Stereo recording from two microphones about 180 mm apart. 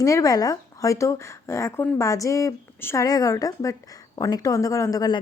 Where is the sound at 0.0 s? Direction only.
20° left (ahead or behind).